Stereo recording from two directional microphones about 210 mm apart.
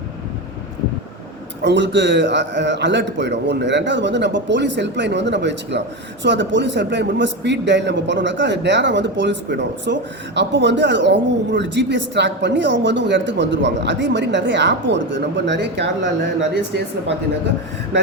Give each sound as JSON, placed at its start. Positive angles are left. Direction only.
{"t": 1.6, "sound": "a man's voice", "side_deg": -60}